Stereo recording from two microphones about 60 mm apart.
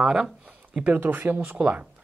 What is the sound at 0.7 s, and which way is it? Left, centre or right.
Speech, right.